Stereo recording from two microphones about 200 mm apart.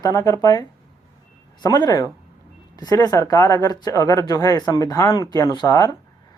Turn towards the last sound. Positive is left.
turn(degrees=20)  # may be behind; listen again after turning